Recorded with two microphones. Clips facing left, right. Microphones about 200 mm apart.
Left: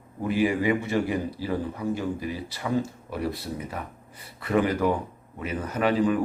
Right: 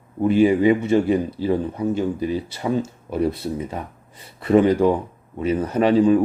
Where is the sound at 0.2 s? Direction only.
25° right (ahead or behind).